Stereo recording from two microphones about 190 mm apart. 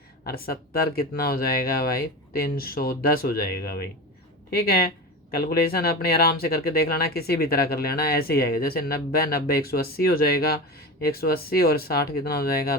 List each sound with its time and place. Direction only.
0.3 s speech: 50° left (ahead or behind)